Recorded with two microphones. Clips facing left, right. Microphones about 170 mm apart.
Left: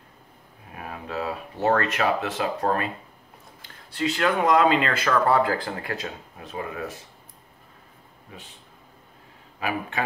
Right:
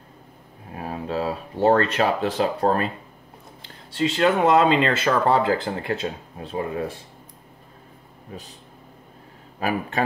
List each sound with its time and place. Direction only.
0.7 s speech: 30° right (ahead or behind)
8.3 s speech: 40° right (ahead or behind)
9.6 s speech: 40° right (ahead or behind)